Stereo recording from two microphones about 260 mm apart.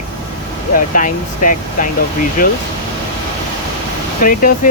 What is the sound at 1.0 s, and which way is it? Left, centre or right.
Speech, left.